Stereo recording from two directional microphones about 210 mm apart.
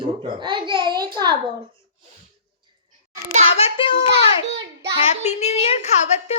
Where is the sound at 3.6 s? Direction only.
30° left (ahead or behind).